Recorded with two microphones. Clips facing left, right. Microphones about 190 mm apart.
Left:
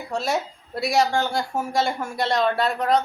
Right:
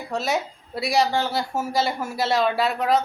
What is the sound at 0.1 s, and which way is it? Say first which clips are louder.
A woman's voice: even; centre (ahead or behind).